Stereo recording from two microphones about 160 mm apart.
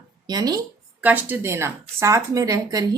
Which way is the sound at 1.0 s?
10° right (ahead or behind).